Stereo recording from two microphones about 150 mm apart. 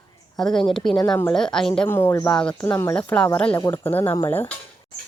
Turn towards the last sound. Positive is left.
turn(degrees=15)  # may be behind; listen again after turning